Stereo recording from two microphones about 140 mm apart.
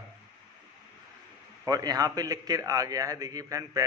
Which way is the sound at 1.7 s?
25° right (ahead or behind).